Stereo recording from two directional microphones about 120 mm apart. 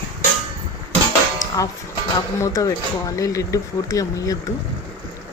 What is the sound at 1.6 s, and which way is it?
A woman's voice, 25° left (ahead or behind).